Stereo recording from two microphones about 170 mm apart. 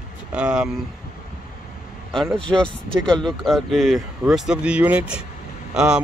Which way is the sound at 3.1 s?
Centre (ahead or behind).